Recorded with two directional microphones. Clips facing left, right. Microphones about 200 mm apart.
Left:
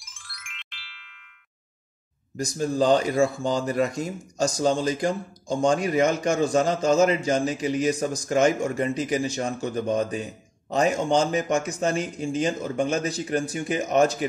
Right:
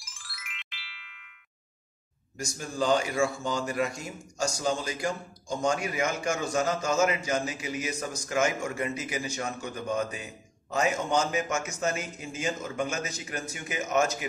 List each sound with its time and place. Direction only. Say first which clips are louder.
0.0 s music: even; centre (ahead or behind)
2.3 s speech: left 9 dB; 35° left (ahead or behind)